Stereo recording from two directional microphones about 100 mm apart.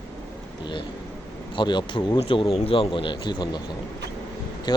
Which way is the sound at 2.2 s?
65° left (ahead or behind).